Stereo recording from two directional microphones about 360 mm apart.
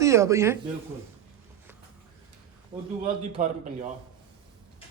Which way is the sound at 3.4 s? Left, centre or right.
Centre.